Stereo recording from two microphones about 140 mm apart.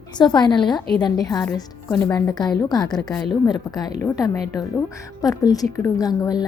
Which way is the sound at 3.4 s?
30° left (ahead or behind).